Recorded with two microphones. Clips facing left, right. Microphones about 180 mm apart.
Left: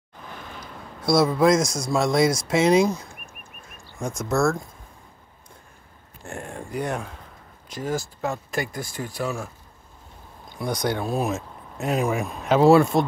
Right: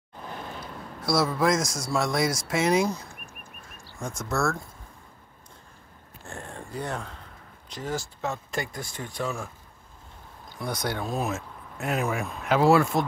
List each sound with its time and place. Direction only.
1.0 s speech: 20° left (ahead or behind)
4.2 s speech: 20° left (ahead or behind)
6.2 s speech: 15° left (ahead or behind)
10.5 s speech: 15° left (ahead or behind)